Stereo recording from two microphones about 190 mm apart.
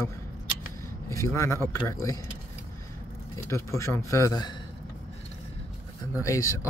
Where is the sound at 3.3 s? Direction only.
15° left (ahead or behind).